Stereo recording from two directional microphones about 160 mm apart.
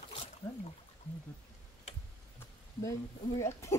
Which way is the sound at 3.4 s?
15° left (ahead or behind).